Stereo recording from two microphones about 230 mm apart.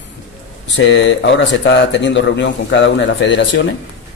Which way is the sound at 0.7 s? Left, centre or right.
Left.